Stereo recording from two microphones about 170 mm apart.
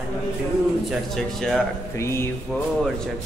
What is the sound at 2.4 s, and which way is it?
Speech, centre (ahead or behind).